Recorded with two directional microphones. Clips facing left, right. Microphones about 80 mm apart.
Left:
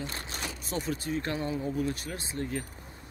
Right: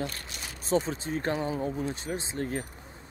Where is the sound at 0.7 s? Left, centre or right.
Right.